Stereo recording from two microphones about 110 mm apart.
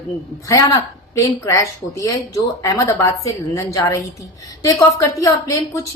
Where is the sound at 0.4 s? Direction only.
30° left (ahead or behind).